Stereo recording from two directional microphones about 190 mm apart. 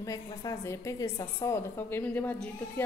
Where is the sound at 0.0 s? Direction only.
15° left (ahead or behind).